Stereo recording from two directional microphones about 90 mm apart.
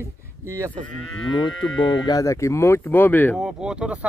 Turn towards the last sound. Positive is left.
turn(degrees=-10)  # may be behind; listen again after turning